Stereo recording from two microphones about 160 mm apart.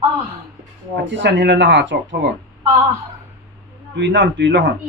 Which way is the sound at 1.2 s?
90° right.